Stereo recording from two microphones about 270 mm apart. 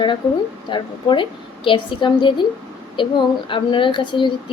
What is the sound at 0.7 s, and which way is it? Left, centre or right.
Speech, centre.